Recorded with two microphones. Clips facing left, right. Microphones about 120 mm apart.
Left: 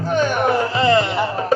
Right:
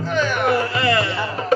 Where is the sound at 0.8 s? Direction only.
25° left (ahead or behind).